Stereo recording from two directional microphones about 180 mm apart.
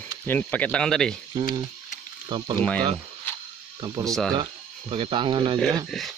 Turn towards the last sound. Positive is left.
turn(degrees=0)  # may be behind; listen again after turning